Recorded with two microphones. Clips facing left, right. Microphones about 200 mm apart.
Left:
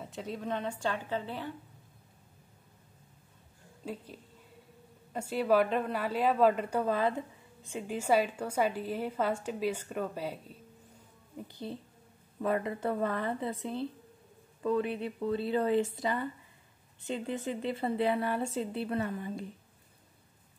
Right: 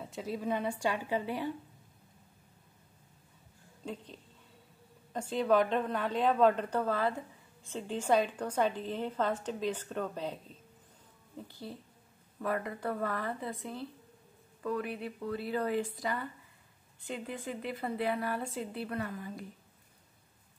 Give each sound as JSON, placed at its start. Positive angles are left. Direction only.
{"t": 0.0, "sound": "a woman's voice", "side_deg": 0}
{"t": 3.8, "sound": "a woman's voice", "side_deg": 5}